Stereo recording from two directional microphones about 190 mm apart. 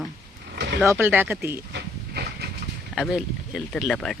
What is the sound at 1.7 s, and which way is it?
Train, 60° right (ahead or behind).